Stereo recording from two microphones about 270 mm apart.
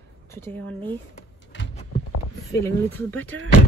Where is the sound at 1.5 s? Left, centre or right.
Left.